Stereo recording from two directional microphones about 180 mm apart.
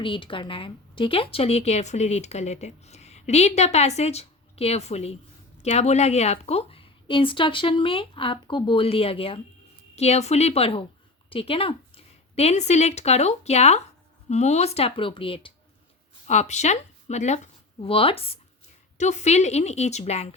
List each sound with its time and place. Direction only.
0.0 s a woman's voice: 30° left (ahead or behind)